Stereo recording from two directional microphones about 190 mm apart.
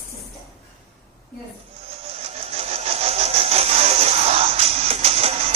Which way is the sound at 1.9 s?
30° right (ahead or behind).